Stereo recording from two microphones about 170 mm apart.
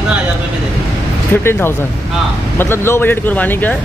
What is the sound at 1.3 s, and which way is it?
A woman's voice, 15° left (ahead or behind).